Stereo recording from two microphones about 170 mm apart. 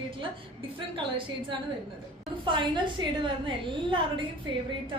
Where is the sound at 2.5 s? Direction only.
30° right (ahead or behind).